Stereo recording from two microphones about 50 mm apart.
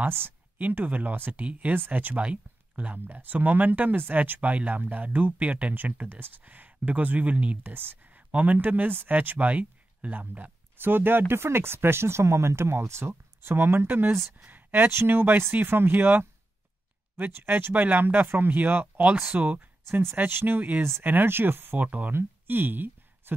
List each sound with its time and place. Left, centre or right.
0.6 s speech: right
1.4 s speech: right
7.7 s speech: right
10.8 s speech: right
17.3 s speech: right
17.7 s speech: right
19.9 s speech: right
20.2 s speech: right
21.8 s speech: right
22.1 s a sound: right